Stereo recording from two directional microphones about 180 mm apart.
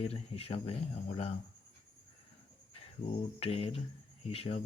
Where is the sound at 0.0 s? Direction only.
35° left (ahead or behind).